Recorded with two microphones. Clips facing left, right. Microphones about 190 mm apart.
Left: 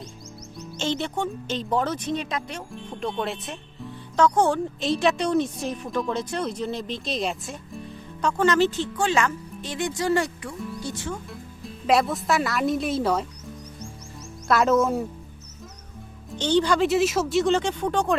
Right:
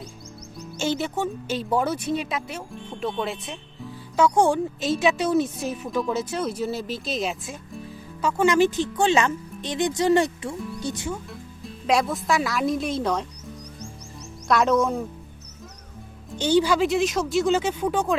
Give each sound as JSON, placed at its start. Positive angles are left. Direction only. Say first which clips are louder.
{"t": 0.8, "sound": "speech", "louder": "right 1 dB", "side_deg": -5}
{"t": 4.8, "sound": "speech", "louder": "left 1 dB", "side_deg": 0}
{"t": 11.3, "sound": "speech", "louder": "even", "side_deg": 0}
{"t": 14.4, "sound": "speech", "louder": "even", "side_deg": 5}
{"t": 16.3, "sound": "speech", "louder": "right 1 dB", "side_deg": -10}